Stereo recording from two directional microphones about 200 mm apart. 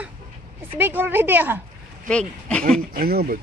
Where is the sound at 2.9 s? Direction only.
50° right (ahead or behind).